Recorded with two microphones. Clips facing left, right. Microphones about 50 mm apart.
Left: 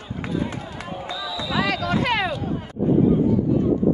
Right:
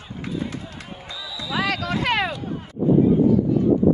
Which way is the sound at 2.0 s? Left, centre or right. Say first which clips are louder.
Right 3 dB; right.